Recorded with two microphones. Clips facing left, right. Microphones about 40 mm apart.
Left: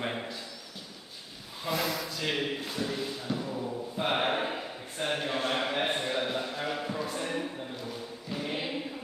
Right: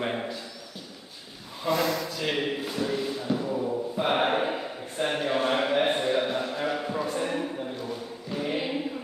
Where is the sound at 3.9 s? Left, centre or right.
Centre.